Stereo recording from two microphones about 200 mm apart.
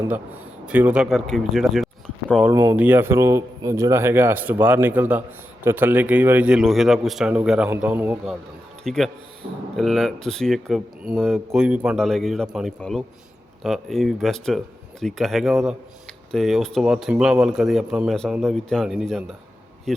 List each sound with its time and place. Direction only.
0.6 s speech: 5° right (ahead or behind)
2.5 s speech: 20° right (ahead or behind); by 19.4 s centre (ahead or behind)